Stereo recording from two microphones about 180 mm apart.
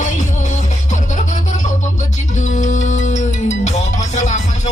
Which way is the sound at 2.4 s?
40° left (ahead or behind).